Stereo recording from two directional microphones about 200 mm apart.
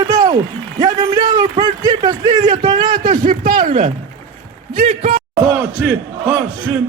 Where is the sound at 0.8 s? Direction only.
20° right (ahead or behind).